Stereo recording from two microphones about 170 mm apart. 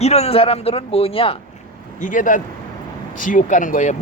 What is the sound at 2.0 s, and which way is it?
A man's voice, 50° left (ahead or behind).